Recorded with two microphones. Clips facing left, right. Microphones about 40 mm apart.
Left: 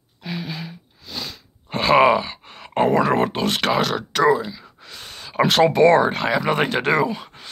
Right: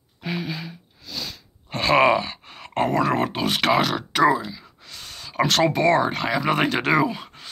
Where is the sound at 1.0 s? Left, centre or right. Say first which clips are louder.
Left 1 dB; centre.